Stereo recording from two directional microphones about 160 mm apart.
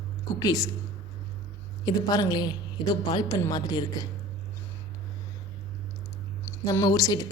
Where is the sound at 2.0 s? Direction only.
25° left (ahead or behind).